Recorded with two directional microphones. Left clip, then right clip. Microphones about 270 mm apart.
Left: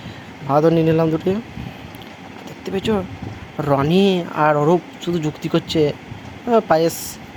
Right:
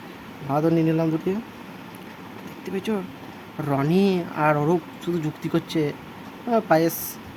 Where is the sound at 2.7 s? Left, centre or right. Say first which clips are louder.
Left 7 dB; centre.